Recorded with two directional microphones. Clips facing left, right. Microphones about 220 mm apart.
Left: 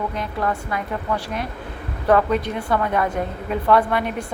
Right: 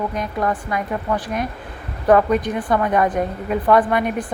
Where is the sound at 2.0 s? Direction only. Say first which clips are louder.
Right 3 dB; 15° right (ahead or behind).